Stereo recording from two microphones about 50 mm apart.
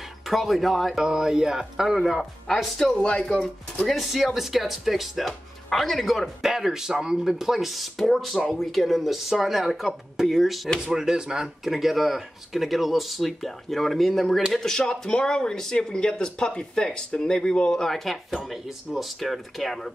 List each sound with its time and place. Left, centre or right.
0.3 s speech: centre
0.9 s speech: centre
2.8 s speech: centre
3.9 s speech: centre
6.4 s speech: centre
10.8 s speech: centre
11.6 s speech: centre